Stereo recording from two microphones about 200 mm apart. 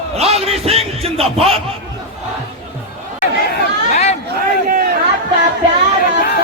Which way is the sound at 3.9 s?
35° left (ahead or behind).